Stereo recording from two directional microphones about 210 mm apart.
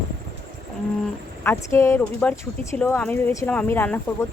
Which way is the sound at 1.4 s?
10° left (ahead or behind).